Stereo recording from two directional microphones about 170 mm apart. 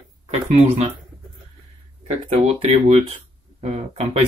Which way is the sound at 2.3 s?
35° right (ahead or behind).